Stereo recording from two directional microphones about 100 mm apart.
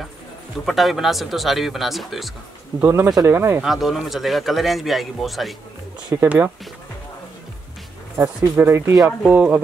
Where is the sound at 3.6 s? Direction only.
5° right (ahead or behind).